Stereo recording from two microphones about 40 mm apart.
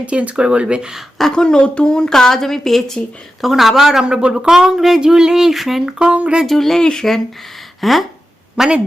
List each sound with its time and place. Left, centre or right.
0.0 s speech: right
1.3 s a woman's voice: centre
3.4 s speech: centre
4.0 s speech: right; by 5.8 s centre
6.0 s speech: right
6.4 s a woman's voice: centre
7.8 s a sound: centre